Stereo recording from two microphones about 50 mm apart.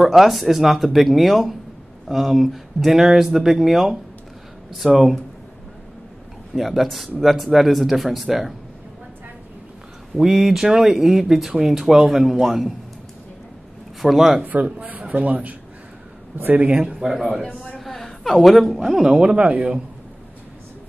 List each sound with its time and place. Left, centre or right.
0.1 s speech: centre
6.5 s speech: centre
10.1 s speech: centre
14.0 s speech: centre
14.4 s speech: right
16.3 s speech: right
16.6 s speech: right
17.7 s a sound: centre
19.0 s speech: centre